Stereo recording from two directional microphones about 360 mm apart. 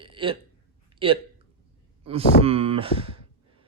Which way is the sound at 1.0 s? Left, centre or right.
Centre.